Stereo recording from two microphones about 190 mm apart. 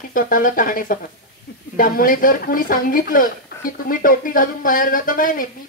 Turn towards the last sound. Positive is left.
turn(degrees=45)  # may be behind; listen again after turning